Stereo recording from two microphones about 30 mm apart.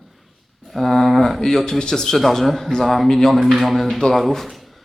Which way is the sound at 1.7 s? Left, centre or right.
Left.